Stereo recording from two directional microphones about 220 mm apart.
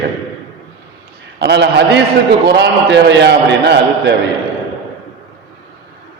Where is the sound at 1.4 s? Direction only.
50° right (ahead or behind).